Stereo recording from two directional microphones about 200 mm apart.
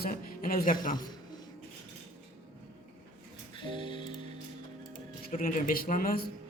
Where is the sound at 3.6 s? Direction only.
25° left (ahead or behind).